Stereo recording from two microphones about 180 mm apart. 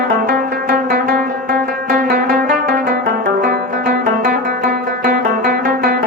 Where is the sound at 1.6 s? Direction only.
50° right (ahead or behind).